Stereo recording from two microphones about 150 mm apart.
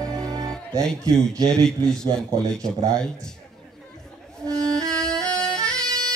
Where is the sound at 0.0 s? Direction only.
25° right (ahead or behind).